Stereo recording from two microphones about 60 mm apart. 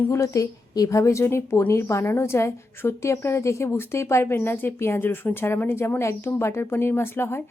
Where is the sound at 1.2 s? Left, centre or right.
Left.